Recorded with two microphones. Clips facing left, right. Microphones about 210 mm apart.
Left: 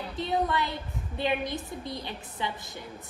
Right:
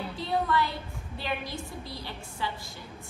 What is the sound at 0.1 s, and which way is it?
A woman's voice, 20° left (ahead or behind).